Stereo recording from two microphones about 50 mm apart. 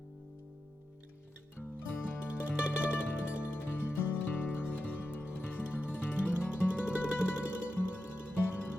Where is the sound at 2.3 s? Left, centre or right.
Right.